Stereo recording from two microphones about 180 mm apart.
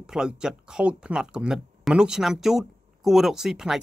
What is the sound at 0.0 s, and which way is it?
Speech, 5° right (ahead or behind).